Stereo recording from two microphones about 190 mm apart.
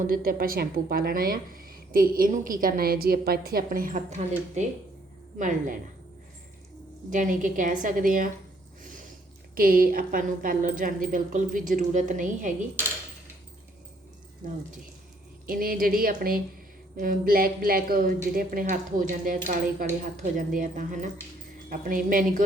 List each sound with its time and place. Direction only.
0.1 s a woman's voice: 50° right (ahead or behind)
7.1 s a woman's voice: 40° right (ahead or behind)
9.6 s a woman's voice: 50° right (ahead or behind)
14.4 s a woman's voice: 45° right (ahead or behind)